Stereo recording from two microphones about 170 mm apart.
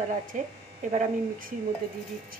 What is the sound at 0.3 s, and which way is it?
Speech, 50° right (ahead or behind).